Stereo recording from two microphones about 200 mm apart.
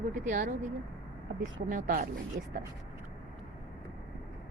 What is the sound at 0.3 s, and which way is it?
Speech, 40° right (ahead or behind).